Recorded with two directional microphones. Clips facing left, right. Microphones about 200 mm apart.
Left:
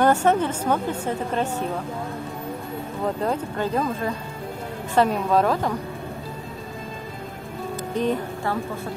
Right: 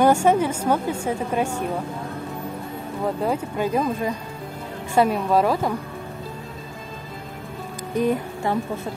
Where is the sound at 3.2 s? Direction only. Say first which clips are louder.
Right 2 dB; 10° right (ahead or behind).